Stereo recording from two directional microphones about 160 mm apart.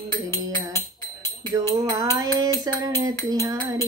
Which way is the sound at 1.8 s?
20° right (ahead or behind).